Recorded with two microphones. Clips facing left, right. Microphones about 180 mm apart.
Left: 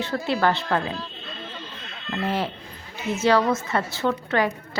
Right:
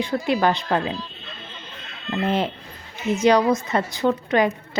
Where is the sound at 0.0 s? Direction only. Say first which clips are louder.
Right 2 dB; 15° right (ahead or behind).